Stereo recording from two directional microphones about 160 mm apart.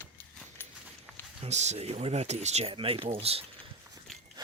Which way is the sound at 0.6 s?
10° left (ahead or behind).